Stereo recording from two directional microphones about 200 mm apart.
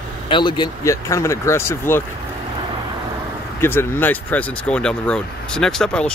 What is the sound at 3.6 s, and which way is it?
Speech, 10° left (ahead or behind).